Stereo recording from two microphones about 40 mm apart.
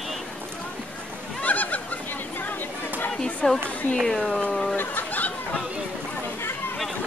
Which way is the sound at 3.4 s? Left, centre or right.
Centre.